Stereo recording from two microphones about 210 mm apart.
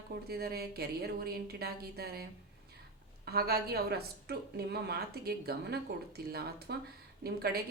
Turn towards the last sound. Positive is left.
turn(degrees=-50)  # may be behind; listen again after turning